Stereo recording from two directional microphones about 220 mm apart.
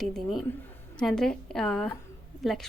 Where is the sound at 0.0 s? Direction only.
Centre (ahead or behind).